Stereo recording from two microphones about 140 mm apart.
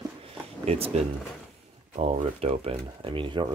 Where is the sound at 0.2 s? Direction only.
45° right (ahead or behind).